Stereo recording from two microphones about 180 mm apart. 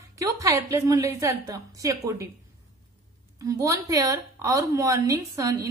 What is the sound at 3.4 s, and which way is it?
A woman's voice, 20° right (ahead or behind).